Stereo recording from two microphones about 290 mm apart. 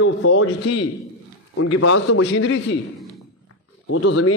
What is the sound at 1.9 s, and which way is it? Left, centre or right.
Speech, left.